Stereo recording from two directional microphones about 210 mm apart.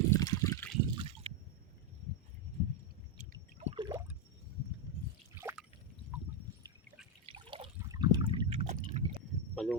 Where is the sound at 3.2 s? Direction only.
30° right (ahead or behind).